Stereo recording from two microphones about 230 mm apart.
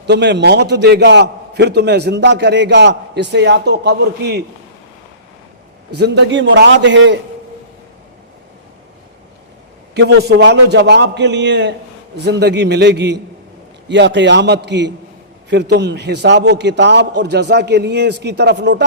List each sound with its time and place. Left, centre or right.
0.1 s a man's voice: right
6.0 s a man's voice: right
9.9 s a man's voice: right